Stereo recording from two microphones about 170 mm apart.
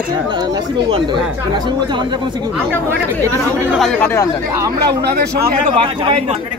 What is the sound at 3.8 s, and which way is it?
Speech, centre (ahead or behind).